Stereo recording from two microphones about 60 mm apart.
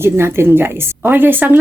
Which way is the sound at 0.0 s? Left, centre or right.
Right.